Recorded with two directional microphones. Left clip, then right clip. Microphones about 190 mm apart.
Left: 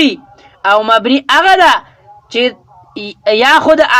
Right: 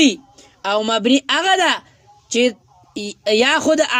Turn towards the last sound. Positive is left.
turn(degrees=-20)  # may be behind; listen again after turning